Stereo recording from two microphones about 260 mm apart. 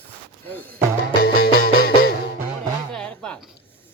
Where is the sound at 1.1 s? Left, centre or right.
Left.